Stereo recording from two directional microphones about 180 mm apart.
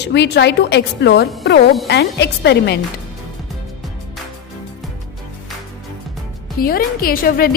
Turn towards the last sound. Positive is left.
turn(degrees=55)  # may be behind; listen again after turning